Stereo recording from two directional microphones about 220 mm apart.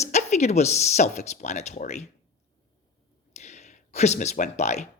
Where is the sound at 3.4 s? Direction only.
30° left (ahead or behind).